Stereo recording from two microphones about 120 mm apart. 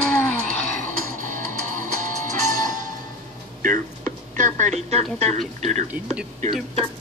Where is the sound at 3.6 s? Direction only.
90° right.